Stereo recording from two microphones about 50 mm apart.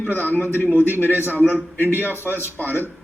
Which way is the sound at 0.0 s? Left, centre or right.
Left.